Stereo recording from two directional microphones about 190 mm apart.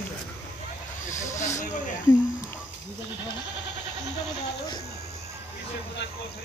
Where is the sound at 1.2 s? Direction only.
15° left (ahead or behind).